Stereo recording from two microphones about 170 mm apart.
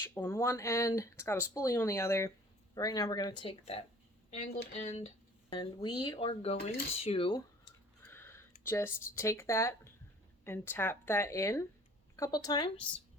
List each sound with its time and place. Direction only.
0.1 s speech: 15° left (ahead or behind); by 5.5 s 40° left (ahead or behind)
5.5 s speech: 25° left (ahead or behind)
8.0 s speech: 15° left (ahead or behind)